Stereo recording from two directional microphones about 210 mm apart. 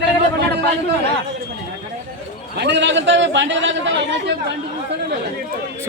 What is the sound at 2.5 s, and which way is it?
A man's voice, 55° right (ahead or behind).